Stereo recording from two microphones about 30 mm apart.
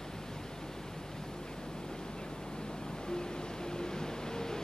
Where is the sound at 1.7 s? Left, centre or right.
Left.